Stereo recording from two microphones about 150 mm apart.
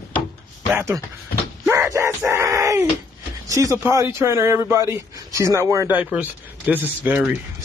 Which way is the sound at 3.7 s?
15° right (ahead or behind).